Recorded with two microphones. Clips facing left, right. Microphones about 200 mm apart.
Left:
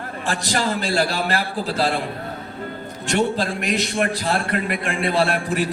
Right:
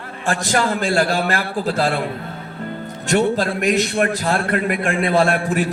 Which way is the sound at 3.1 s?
45° right (ahead or behind).